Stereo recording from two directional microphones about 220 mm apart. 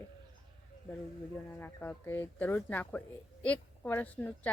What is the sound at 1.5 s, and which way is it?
Speech, 10° left (ahead or behind).